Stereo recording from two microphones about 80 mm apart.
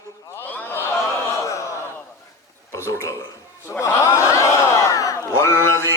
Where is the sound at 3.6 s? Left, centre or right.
Left.